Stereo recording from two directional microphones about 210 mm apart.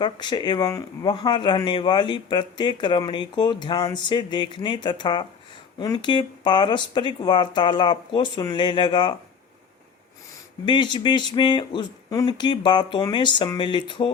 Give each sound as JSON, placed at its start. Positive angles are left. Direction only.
{"t": 0.0, "sound": "speech", "side_deg": 20}
{"t": 10.7, "sound": "speech", "side_deg": 20}